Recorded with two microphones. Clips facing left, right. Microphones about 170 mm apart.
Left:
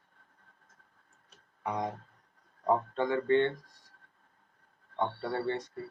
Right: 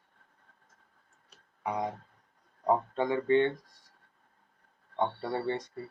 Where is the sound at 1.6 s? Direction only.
5° right (ahead or behind).